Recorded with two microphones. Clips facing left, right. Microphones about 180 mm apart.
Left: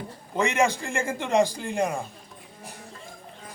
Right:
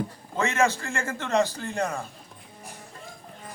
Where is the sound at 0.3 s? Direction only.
15° left (ahead or behind).